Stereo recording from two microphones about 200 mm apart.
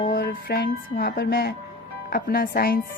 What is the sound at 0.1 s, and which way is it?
Speech, 50° left (ahead or behind).